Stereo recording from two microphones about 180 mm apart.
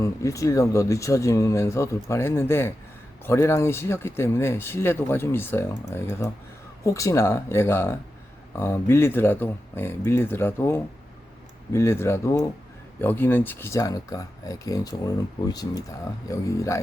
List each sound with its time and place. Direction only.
0.0 s speech: 15° left (ahead or behind)